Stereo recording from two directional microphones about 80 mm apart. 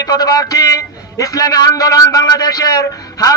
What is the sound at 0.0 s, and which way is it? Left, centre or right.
A man's voice, left.